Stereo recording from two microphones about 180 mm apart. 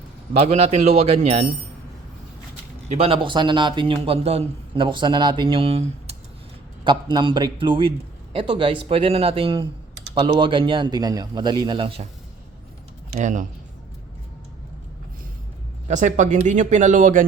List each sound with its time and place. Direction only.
0.3 s speech: 40° right (ahead or behind)
2.9 s speech: 30° right (ahead or behind)
13.1 s speech: 45° right (ahead or behind)
15.9 s speech: 40° right (ahead or behind)